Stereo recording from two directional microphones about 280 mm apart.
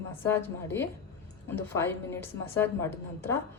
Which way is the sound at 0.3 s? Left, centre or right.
Centre.